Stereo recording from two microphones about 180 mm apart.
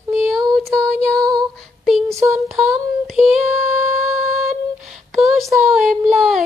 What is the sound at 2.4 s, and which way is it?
Speech, centre (ahead or behind).